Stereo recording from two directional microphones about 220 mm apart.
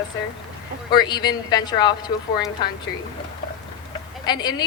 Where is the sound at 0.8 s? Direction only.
20° left (ahead or behind).